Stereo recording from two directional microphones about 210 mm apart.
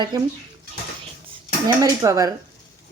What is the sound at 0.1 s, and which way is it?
Speech, 20° right (ahead or behind).